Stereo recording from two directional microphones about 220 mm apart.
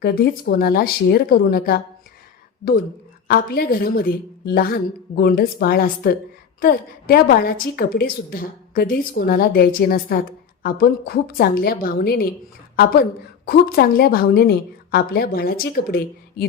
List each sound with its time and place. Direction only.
0.0 s a woman's voice: 45° left (ahead or behind)
3.2 s a woman's voice: 45° left (ahead or behind)